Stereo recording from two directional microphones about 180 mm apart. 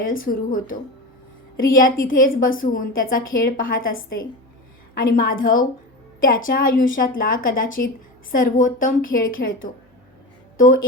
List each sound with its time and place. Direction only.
0.0 s a woman's voice: 50° left (ahead or behind)
4.9 s a woman's voice: 50° left (ahead or behind)
10.6 s a woman's voice: 50° left (ahead or behind)